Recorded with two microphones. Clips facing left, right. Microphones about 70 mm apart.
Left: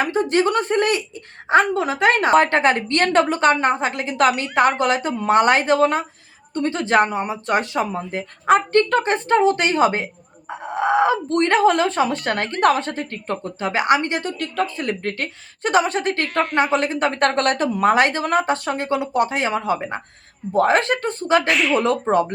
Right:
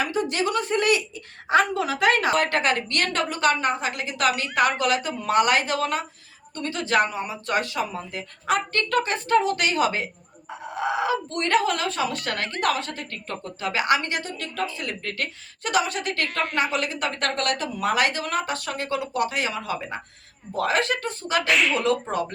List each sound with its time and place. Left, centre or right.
0.0 s speech: left
14.3 s speech: left
21.5 s speech: centre
21.8 s speech: left